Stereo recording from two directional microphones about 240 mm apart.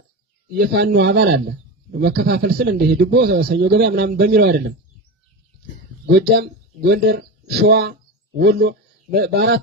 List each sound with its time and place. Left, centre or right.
0.5 s a man's voice: right
6.1 s a man's voice: right
9.1 s speech: right